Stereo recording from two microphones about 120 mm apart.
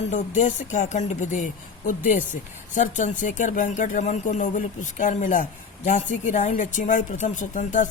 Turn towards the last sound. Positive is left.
turn(degrees=90)